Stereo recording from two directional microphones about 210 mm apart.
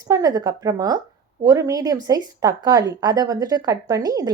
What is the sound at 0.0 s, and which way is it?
Speech, 15° right (ahead or behind).